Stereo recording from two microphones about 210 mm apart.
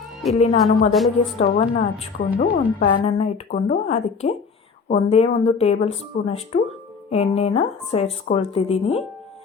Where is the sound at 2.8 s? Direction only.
30° left (ahead or behind).